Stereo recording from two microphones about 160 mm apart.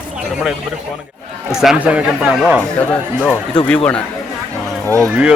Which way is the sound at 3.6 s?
10° left (ahead or behind).